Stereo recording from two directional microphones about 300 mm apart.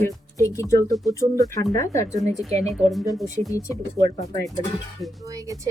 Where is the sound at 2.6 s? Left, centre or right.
Centre.